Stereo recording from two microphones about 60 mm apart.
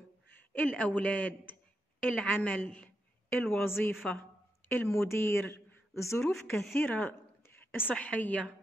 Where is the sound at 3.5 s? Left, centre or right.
Left.